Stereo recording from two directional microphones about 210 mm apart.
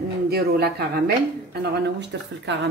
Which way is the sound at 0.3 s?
50° right (ahead or behind).